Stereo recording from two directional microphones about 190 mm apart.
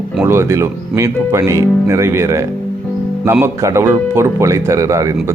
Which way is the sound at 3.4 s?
15° right (ahead or behind).